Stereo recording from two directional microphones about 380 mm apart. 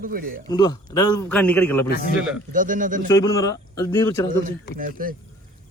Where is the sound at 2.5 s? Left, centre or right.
Right.